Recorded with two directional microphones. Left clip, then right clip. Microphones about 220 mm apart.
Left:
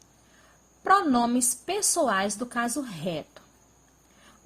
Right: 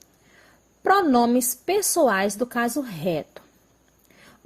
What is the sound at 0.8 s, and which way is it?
A woman's voice, 30° right (ahead or behind).